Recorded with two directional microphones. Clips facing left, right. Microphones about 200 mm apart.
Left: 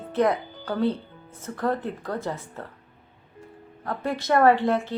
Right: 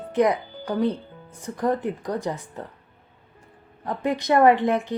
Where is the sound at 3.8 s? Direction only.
15° right (ahead or behind).